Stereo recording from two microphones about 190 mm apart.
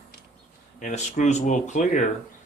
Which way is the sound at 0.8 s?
40° left (ahead or behind).